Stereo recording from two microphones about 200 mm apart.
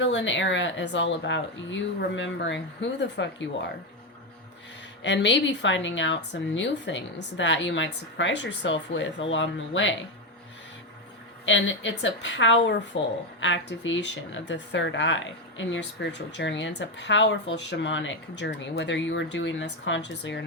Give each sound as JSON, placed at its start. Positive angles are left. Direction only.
{"t": 0.0, "sound": "speech", "side_deg": 65}
{"t": 5.0, "sound": "speech", "side_deg": 60}
{"t": 11.4, "sound": "speech", "side_deg": 70}